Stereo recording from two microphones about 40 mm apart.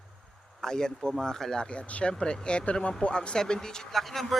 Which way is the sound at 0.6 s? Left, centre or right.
Centre.